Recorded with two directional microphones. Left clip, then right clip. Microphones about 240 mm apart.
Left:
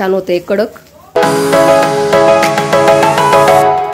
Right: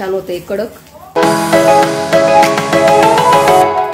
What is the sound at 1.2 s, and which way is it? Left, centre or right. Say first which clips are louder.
Music: left 1 dB; centre.